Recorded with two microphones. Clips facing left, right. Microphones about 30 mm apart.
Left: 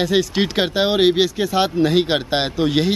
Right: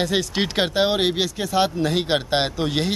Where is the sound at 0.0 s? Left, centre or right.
Centre.